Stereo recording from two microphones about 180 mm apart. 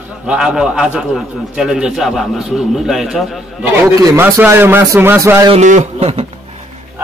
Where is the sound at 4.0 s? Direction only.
15° right (ahead or behind).